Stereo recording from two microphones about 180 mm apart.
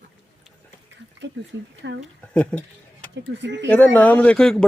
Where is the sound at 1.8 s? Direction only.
80° right.